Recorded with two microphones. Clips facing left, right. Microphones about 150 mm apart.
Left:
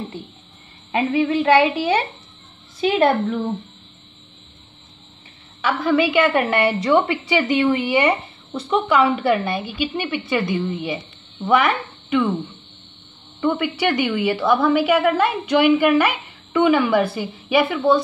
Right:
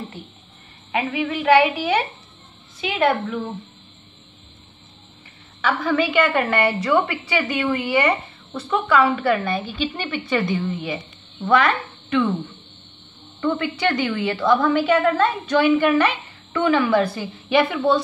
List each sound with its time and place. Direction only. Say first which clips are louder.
0.9 s a woman's voice: left 5 dB; 30° left (ahead or behind)
5.7 s a woman's voice: left 2 dB; 5° left (ahead or behind)
13.4 s a woman's voice: left 2 dB; 10° left (ahead or behind)